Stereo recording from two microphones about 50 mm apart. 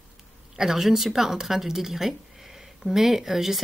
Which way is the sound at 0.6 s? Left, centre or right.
Centre.